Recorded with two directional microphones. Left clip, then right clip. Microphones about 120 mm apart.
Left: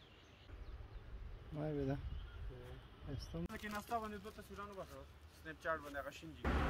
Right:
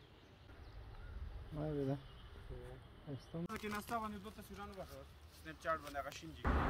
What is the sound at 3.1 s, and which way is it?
Speech, 10° left (ahead or behind).